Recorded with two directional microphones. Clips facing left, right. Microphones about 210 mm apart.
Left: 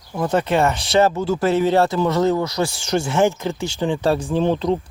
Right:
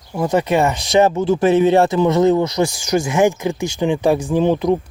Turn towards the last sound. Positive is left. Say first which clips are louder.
# right 3 dB
turn(degrees=-15)  # may be behind; listen again after turning